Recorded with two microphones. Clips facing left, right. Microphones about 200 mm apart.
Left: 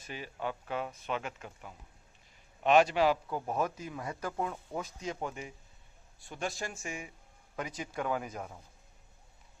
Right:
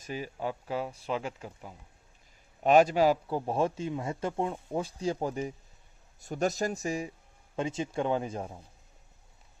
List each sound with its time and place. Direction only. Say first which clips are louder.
0.0 s a man's voice: right 4 dB; 40° right (ahead or behind)
2.6 s a man's voice: right 3 dB; 40° right (ahead or behind)